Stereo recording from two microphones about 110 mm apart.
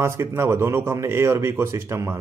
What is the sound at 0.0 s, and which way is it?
Speech, 25° right (ahead or behind).